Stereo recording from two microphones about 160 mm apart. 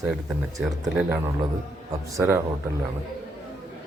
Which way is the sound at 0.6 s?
5° right (ahead or behind).